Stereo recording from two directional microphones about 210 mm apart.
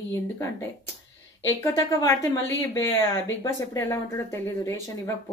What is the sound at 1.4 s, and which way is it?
Speech, 15° left (ahead or behind).